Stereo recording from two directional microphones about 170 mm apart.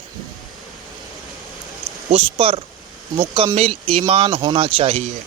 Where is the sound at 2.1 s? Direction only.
35° right (ahead or behind).